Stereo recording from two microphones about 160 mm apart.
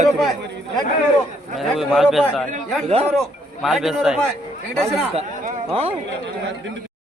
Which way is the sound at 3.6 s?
Centre (ahead or behind).